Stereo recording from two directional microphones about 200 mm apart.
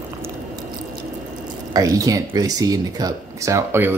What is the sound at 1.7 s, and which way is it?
Speech, 15° right (ahead or behind).